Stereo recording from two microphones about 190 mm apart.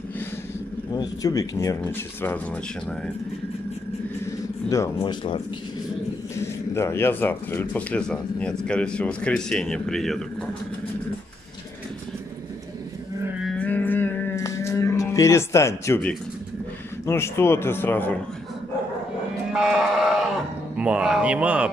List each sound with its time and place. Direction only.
0.9 s speech: 20° left (ahead or behind)
4.6 s speech: 15° left (ahead or behind)
4.9 s speech: 30° left (ahead or behind)
6.3 s speech: 15° left (ahead or behind)
13.2 s livestock: 10° right (ahead or behind)
13.6 s cattle: 10° left (ahead or behind)
17.0 s speech: 15° left (ahead or behind)
19.5 s sheep: 5° right (ahead or behind)
20.7 s speech: 5° right (ahead or behind)